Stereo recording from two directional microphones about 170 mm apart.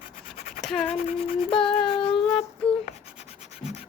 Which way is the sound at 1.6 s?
5° left (ahead or behind).